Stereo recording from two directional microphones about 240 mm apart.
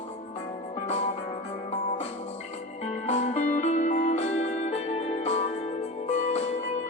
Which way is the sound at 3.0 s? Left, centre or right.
Left.